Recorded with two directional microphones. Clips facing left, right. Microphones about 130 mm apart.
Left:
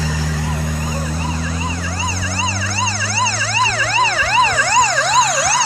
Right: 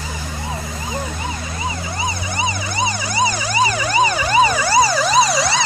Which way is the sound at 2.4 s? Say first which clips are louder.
Right 2 dB; 15° right (ahead or behind).